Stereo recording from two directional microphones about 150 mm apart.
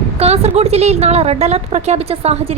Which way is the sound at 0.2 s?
45° right (ahead or behind).